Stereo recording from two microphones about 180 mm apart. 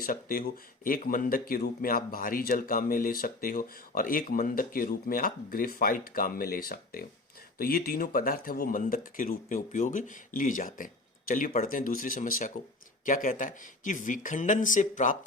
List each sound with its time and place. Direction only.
0.0 s speech: 55° left (ahead or behind)